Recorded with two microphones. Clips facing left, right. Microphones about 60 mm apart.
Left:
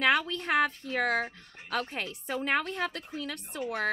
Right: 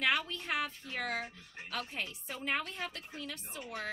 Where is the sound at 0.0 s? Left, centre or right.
Left.